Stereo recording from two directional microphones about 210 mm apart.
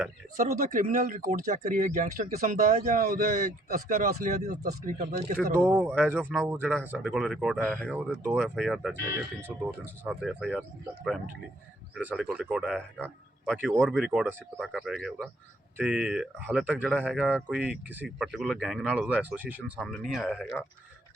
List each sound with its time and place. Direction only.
0.6 s speech: 40° right (ahead or behind)
5.6 s speech: 5° right (ahead or behind)
6.2 s speech: 5° left (ahead or behind)
6.5 s speech: 10° right (ahead or behind)
11.9 s speech: 5° right (ahead or behind)